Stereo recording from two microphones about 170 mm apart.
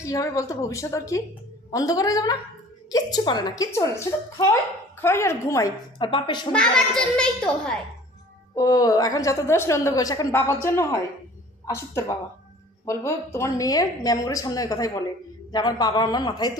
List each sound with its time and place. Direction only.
0.0 s a woman's voice: 20° left (ahead or behind)
6.5 s a child's voice: 5° left (ahead or behind)
8.5 s a woman's voice: 20° left (ahead or behind)